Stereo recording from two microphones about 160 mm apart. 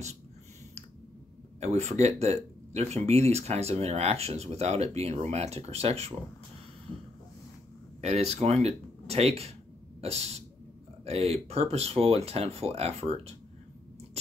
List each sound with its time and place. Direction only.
1.6 s speech: 45° right (ahead or behind)
8.0 s speech: 40° right (ahead or behind)
9.9 s sneeze: 40° right (ahead or behind)
11.1 s speech: 40° right (ahead or behind)